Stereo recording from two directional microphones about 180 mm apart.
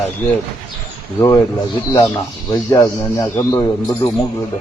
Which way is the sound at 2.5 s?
20° left (ahead or behind).